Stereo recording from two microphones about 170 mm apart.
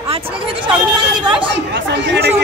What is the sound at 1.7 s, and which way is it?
Chatter, 90° right.